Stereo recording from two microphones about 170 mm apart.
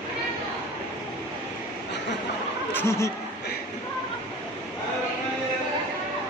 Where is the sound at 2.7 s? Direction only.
15° left (ahead or behind).